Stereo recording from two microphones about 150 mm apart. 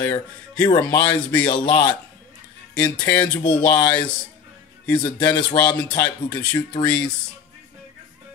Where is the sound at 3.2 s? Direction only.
30° left (ahead or behind).